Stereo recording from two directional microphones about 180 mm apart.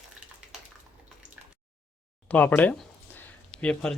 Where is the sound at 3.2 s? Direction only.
5° left (ahead or behind).